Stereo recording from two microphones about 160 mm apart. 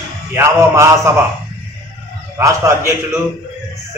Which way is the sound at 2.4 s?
20° right (ahead or behind).